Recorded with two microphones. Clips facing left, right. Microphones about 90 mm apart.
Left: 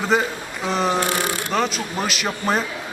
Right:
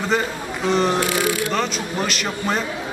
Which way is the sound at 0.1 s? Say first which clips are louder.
Left 2 dB; 5° left (ahead or behind).